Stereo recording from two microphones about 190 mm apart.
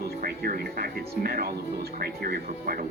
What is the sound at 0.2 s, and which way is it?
Speech, 50° right (ahead or behind).